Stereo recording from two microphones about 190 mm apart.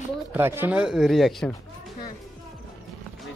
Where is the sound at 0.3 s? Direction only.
10° right (ahead or behind).